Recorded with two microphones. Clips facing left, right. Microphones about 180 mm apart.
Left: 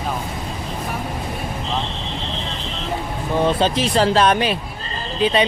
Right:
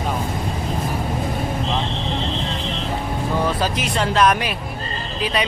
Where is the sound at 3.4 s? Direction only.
30° left (ahead or behind).